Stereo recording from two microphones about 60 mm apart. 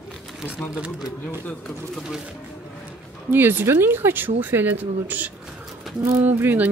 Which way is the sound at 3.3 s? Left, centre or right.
Right.